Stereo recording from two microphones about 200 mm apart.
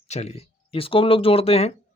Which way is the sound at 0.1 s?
30° left (ahead or behind).